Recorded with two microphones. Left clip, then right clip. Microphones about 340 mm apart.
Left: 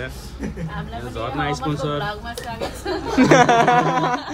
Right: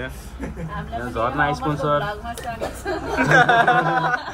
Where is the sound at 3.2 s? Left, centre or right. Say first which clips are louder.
Left 1 dB; centre.